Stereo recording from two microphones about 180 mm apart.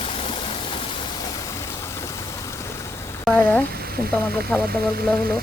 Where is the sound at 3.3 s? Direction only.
5° left (ahead or behind).